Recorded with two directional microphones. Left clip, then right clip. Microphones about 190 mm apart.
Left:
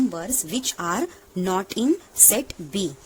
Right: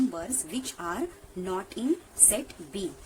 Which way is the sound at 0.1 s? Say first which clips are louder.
Left 6 dB; 40° left (ahead or behind).